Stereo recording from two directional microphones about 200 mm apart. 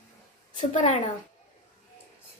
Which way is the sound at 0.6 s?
40° left (ahead or behind).